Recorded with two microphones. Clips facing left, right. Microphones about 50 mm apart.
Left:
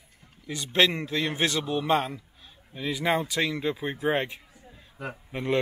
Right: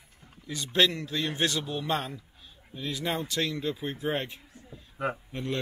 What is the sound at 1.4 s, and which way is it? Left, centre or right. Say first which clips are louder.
Speech: left 5 dB; centre.